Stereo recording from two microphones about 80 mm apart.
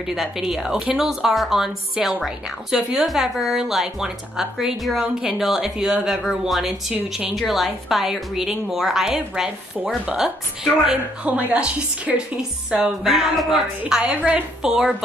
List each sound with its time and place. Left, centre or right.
0.0 s speech: centre
11.2 s a woman's voice: right
12.4 s a woman's voice: centre